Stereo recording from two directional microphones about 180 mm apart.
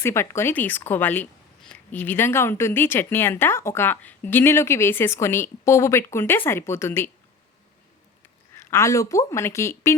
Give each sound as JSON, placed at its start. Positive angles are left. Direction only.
{"t": 0.0, "sound": "a woman's voice", "side_deg": 15}
{"t": 8.7, "sound": "a woman's voice", "side_deg": 15}